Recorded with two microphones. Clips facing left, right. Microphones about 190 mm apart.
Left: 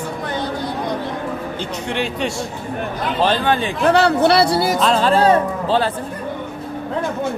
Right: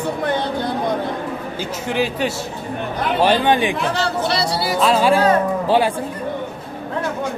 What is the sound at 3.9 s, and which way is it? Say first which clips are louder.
Speech: left 7 dB; 60° left (ahead or behind).